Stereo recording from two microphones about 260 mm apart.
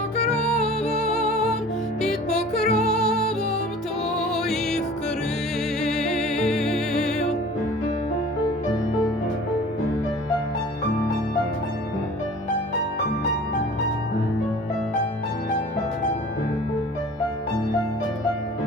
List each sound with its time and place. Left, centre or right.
0.9 s music: left
2.0 s music: centre
5.8 s music: centre